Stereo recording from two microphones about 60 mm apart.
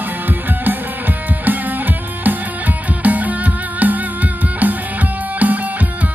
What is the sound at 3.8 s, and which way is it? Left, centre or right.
Music, right.